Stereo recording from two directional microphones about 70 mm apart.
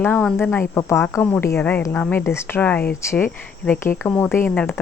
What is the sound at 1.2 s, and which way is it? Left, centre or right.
Speech, left.